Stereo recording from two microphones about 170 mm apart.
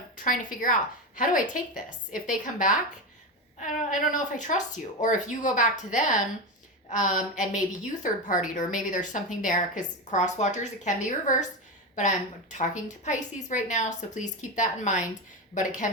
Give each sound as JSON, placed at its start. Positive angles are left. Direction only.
{"t": 0.3, "sound": "a woman's voice", "side_deg": 50}